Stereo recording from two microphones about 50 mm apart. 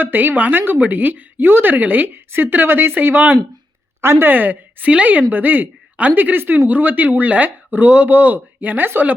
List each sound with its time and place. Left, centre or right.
0.0 s a woman's voice: right